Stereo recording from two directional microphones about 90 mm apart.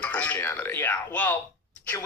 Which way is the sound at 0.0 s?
20° left (ahead or behind).